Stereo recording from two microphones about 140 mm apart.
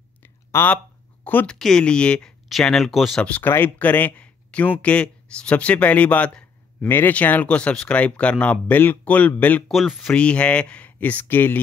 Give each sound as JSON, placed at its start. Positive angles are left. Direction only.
{"t": 0.2, "sound": "a sound", "side_deg": 15}
{"t": 1.2, "sound": "speech", "side_deg": 10}
{"t": 9.7, "sound": "speech", "side_deg": 0}